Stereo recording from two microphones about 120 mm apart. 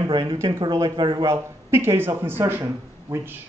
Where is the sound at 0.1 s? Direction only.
45° right (ahead or behind).